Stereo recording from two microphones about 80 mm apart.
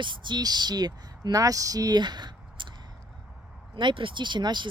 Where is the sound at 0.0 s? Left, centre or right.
Right.